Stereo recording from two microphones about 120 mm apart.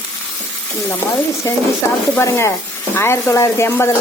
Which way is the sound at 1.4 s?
25° left (ahead or behind).